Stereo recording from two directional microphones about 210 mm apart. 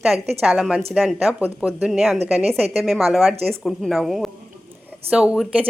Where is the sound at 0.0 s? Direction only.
5° right (ahead or behind).